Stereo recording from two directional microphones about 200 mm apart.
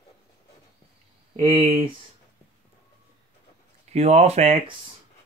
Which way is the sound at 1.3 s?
25° right (ahead or behind).